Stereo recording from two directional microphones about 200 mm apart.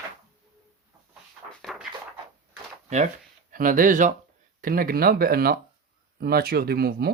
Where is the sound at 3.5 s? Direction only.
45° right (ahead or behind).